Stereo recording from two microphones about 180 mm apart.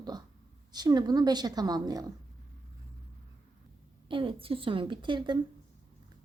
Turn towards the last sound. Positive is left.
turn(degrees=-25)  # may be behind; listen again after turning